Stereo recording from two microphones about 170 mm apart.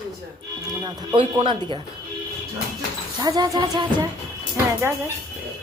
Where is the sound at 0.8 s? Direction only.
25° right (ahead or behind).